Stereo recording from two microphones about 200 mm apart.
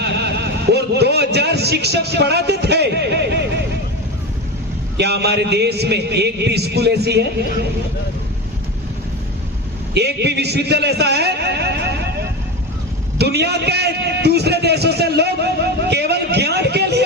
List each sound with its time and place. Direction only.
0.0 s a man's voice: 55° right (ahead or behind)
4.9 s a man's voice: 55° right (ahead or behind)
9.9 s a man's voice: 55° right (ahead or behind)
13.1 s a man's voice: 55° right (ahead or behind)
15.9 s a sound: 55° right (ahead or behind)